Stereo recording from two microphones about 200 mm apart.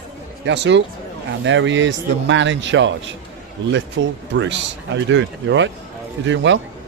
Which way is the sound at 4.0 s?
65° right (ahead or behind).